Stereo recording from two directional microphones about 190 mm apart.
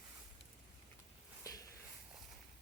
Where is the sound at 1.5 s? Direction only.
20° left (ahead or behind).